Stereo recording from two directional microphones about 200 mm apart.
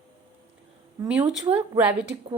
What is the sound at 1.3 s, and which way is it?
Speech, 5° right (ahead or behind).